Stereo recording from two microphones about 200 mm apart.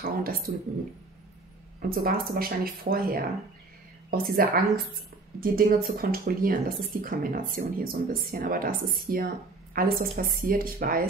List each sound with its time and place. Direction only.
0.0 s speech: 45° right (ahead or behind)
1.8 s speech: 50° right (ahead or behind)